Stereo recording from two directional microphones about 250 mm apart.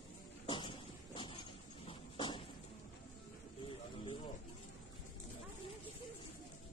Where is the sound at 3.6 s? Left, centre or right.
Left.